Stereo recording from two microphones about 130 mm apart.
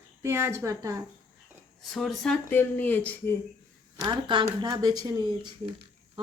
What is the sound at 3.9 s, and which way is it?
Speech, 30° right (ahead or behind).